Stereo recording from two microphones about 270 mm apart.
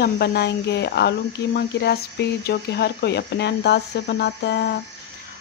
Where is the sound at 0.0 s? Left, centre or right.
Left.